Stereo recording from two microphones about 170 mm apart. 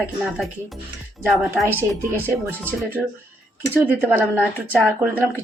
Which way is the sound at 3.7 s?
10° right (ahead or behind).